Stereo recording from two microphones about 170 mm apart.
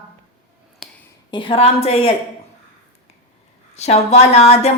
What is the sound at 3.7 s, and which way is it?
A woman's voice, 40° left (ahead or behind).